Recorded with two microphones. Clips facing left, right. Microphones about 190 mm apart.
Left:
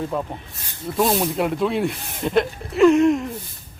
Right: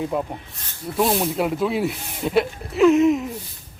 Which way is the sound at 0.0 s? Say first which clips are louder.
Right 1 dB; 10° right (ahead or behind).